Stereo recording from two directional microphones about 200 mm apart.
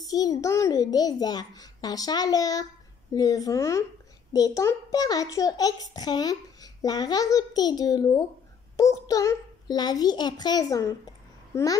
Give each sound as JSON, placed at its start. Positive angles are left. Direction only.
{"t": 0.0, "sound": "a child's voice", "side_deg": 20}